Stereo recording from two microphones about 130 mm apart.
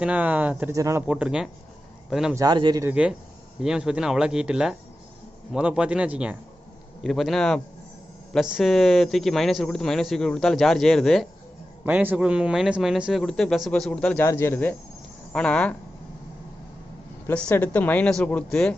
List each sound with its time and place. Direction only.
0.0 s a man's voice: 10° right (ahead or behind)
0.7 s speech: 25° right (ahead or behind)
1.0 s a man's voice: 5° right (ahead or behind)
2.3 s speech: 30° right (ahead or behind)
2.9 s a man's voice: 5° right (ahead or behind)
11.9 s speech: 10° right (ahead or behind); by 14.3 s 10° left (ahead or behind)
14.3 s speech: 20° left (ahead or behind)
17.2 s speech: 10° left (ahead or behind)